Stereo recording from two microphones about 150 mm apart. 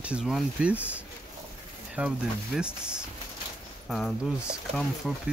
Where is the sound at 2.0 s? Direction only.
5° right (ahead or behind).